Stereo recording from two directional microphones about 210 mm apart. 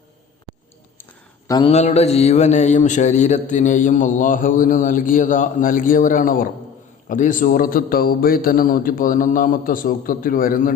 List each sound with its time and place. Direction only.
1.5 s speech: 20° left (ahead or behind)
1.7 s speech: 30° left (ahead or behind)